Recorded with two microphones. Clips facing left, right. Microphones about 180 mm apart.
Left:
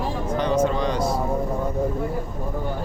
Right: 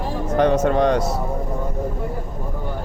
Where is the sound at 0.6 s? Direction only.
65° right (ahead or behind).